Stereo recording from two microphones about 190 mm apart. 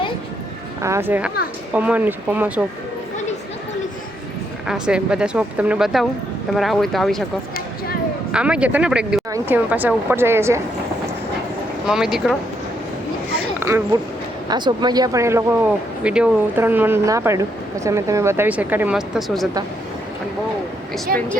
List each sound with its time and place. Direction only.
0.8 s speech: 15° right (ahead or behind)
4.6 s speech: 5° right (ahead or behind)
8.3 s speech: 5° right (ahead or behind)
11.9 s speech: 5° right (ahead or behind)
13.6 s speech: 15° right (ahead or behind)